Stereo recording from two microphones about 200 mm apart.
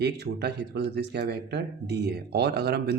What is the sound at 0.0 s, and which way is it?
A man's voice, 55° right (ahead or behind).